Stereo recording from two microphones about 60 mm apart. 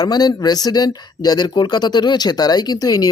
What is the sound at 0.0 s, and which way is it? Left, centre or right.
Speech, left.